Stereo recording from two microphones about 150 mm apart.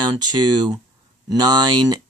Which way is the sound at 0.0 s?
25° right (ahead or behind).